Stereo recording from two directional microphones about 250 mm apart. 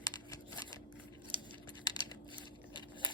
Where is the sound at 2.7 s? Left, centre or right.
Centre.